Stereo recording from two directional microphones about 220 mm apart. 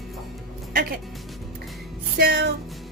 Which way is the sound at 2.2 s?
45° right (ahead or behind).